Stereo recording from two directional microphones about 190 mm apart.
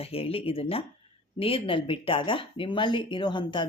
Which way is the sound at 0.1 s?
30° left (ahead or behind).